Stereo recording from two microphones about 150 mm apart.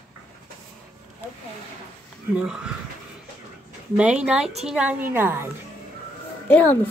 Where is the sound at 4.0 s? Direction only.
5° right (ahead or behind).